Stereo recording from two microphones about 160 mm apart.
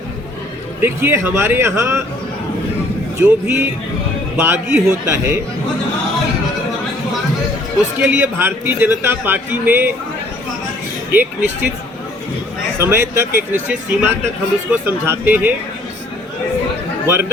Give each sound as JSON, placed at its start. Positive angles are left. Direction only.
{"t": 0.8, "sound": "a man's voice", "side_deg": -15}
{"t": 3.2, "sound": "a man's voice", "side_deg": -15}
{"t": 7.9, "sound": "a man's voice", "side_deg": -10}
{"t": 11.1, "sound": "speech", "side_deg": -10}
{"t": 12.8, "sound": "a man's voice", "side_deg": -15}
{"t": 17.1, "sound": "a man's voice", "side_deg": -15}